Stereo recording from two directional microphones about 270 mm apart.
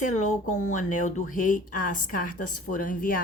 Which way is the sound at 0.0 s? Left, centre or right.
Left.